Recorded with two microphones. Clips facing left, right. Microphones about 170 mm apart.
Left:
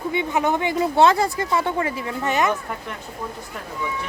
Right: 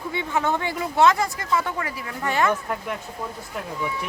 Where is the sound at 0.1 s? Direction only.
15° left (ahead or behind).